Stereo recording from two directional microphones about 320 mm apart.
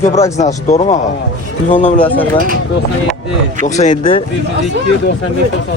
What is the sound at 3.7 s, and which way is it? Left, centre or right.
Speech, left.